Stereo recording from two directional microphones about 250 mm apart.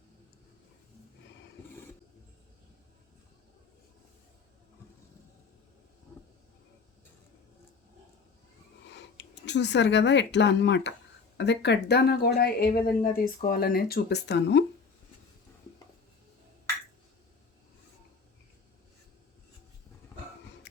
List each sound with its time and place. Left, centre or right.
8.9 s speech: left